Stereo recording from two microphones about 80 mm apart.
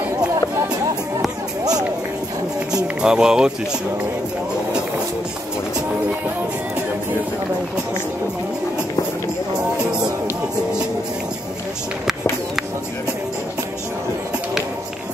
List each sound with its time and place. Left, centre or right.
1.6 s music: right
2.7 s speech: centre